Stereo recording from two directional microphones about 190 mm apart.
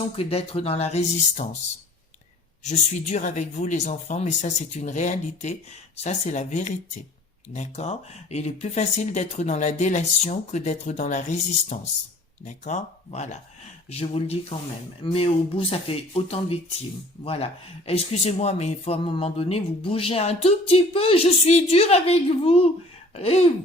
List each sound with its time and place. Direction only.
0.2 s speech: 30° left (ahead or behind)
2.6 s speech: 40° left (ahead or behind)